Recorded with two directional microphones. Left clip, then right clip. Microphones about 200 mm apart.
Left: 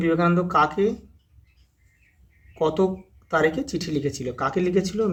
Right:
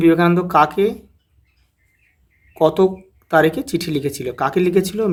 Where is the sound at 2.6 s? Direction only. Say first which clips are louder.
Right 7 dB; 45° right (ahead or behind).